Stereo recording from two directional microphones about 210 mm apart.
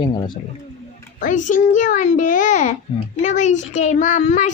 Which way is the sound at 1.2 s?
35° left (ahead or behind).